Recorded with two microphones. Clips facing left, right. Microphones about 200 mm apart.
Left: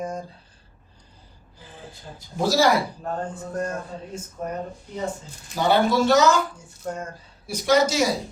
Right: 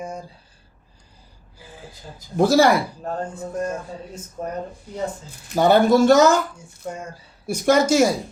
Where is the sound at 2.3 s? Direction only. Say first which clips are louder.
Right 5 dB; 55° right (ahead or behind).